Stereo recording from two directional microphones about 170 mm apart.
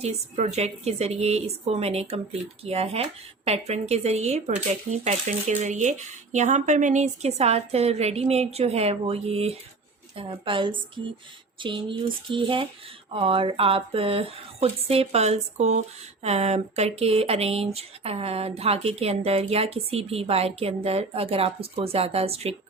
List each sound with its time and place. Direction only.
0.0 s a woman's voice: 40° right (ahead or behind)